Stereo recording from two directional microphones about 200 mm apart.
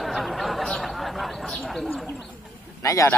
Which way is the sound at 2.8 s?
15° left (ahead or behind).